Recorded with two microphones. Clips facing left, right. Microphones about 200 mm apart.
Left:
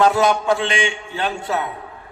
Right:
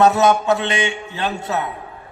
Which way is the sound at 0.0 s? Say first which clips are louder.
Right 2 dB; 25° right (ahead or behind).